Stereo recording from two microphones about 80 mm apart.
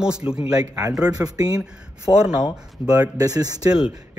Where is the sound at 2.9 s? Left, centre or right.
Right.